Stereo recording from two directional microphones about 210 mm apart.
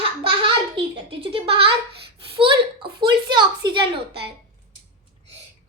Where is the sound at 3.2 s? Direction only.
20° right (ahead or behind).